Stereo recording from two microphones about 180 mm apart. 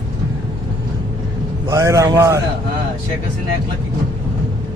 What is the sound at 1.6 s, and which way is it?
Speech, 15° right (ahead or behind).